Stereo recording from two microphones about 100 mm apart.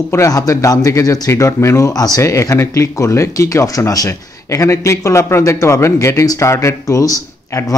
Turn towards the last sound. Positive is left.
turn(degrees=35)  # may be behind; listen again after turning